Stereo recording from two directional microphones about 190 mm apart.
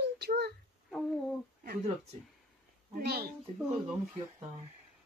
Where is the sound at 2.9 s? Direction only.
55° right (ahead or behind).